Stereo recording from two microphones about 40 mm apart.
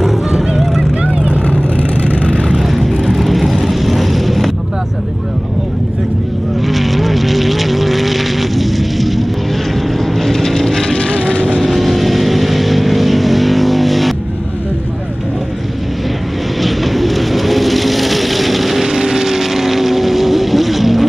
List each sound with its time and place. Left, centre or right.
0.0 s music: centre
0.7 s vehicle: right
1.4 s vehicle: left
2.1 s vehicle: left
2.4 s vehicle: centre
6.7 s vehicle: centre
11.0 s vehicle: left
11.4 s vehicle: centre
16.6 s vehicle: centre